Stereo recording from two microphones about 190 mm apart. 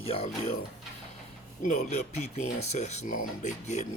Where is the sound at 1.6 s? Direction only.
40° left (ahead or behind).